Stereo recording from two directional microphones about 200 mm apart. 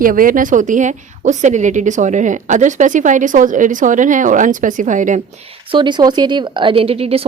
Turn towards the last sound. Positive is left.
turn(degrees=-30)  # may be behind; listen again after turning